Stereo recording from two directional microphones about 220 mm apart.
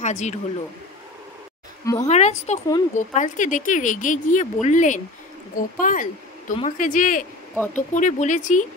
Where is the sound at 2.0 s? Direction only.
30° left (ahead or behind).